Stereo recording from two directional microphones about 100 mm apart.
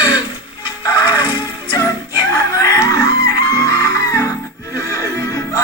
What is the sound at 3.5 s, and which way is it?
Music, 35° left (ahead or behind).